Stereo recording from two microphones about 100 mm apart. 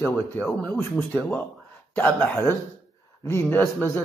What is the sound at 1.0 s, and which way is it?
A man's voice, 15° left (ahead or behind).